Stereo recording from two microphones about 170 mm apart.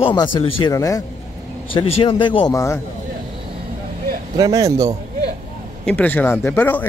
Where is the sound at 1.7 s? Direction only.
30° left (ahead or behind).